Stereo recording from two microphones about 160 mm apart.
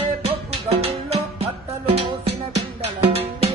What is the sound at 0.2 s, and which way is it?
Music, 40° right (ahead or behind).